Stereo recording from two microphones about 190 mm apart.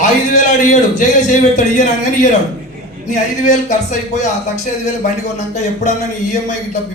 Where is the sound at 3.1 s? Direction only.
40° left (ahead or behind).